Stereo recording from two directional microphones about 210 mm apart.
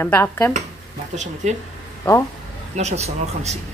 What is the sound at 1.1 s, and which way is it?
Speech, 35° right (ahead or behind).